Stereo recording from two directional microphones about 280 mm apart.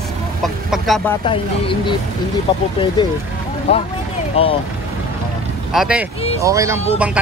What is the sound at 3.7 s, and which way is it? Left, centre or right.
Speech, left.